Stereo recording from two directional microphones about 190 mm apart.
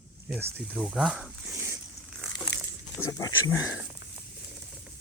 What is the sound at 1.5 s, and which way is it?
Zipper, 15° right (ahead or behind).